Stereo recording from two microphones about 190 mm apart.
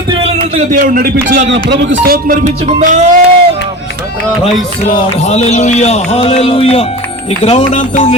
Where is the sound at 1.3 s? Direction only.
65° right (ahead or behind).